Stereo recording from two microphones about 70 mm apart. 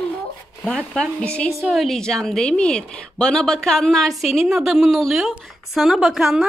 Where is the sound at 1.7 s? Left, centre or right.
Centre.